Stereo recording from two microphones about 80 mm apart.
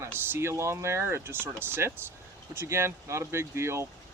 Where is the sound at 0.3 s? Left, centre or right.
Right.